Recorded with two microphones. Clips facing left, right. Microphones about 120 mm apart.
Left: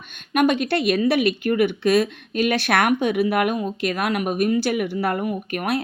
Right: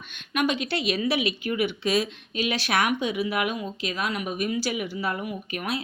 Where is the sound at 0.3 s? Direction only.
50° left (ahead or behind).